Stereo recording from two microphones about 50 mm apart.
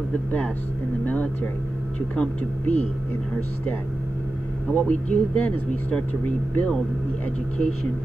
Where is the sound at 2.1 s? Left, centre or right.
Left.